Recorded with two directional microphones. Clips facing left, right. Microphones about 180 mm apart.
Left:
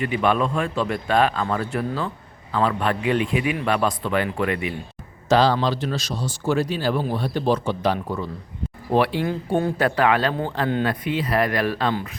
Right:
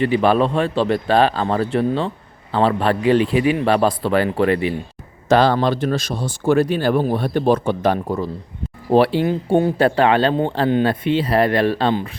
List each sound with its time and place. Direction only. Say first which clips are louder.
0.0 s a man's voice: right 5 dB; 30° right (ahead or behind)
5.3 s speech: right 3 dB; 55° right (ahead or behind); by 12.1 s 30° right (ahead or behind)